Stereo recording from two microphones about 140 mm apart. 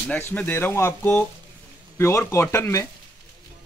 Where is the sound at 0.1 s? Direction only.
10° left (ahead or behind).